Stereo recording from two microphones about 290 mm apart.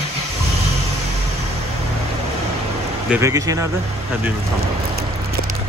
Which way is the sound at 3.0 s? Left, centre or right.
Centre.